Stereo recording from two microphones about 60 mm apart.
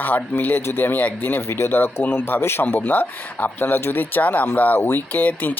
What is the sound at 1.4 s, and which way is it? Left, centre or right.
Speech, left.